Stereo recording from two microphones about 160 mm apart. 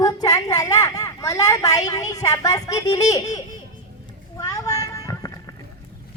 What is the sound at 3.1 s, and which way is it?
Speech, 25° left (ahead or behind).